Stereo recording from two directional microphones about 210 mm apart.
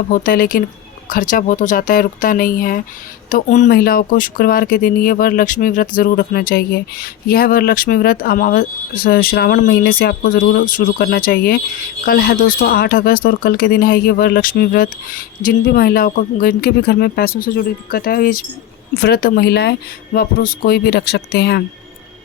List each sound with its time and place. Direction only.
0.1 s speech: 40° left (ahead or behind)